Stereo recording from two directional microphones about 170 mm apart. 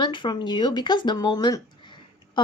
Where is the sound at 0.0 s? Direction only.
25° left (ahead or behind).